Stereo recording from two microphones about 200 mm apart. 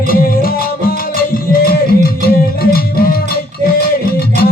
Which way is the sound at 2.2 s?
50° left (ahead or behind).